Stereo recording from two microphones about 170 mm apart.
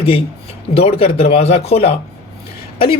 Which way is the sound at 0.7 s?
35° left (ahead or behind).